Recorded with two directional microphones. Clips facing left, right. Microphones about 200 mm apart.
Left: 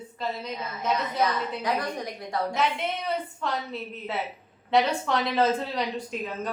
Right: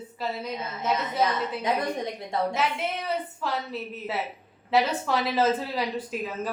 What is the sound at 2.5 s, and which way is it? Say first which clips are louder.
Speech: left 1 dB; 5° right (ahead or behind).